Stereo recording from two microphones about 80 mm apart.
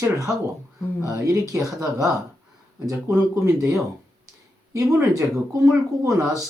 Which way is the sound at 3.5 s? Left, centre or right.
Right.